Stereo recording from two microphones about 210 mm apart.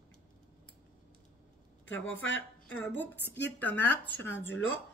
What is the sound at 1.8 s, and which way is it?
Speech, 65° left (ahead or behind).